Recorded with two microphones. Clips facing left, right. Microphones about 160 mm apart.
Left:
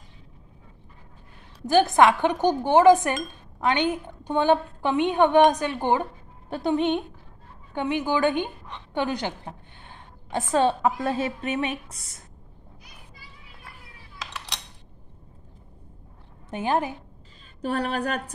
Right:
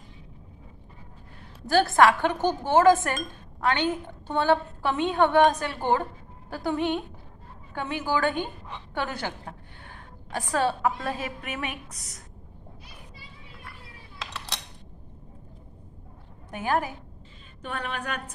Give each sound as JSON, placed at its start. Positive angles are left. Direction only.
{"t": 1.7, "sound": "a woman's voice", "side_deg": 20}
{"t": 16.4, "sound": "a woman's voice", "side_deg": 20}
{"t": 17.6, "sound": "a woman's voice", "side_deg": 35}